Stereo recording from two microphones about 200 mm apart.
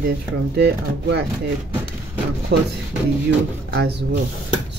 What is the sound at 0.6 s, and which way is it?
Speech, 55° right (ahead or behind).